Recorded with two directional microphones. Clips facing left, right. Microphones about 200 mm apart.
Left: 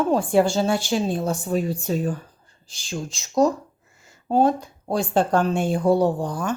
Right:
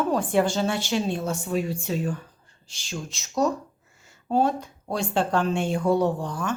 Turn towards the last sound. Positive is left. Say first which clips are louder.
# left 3 dB
turn(degrees=35)  # may be behind; listen again after turning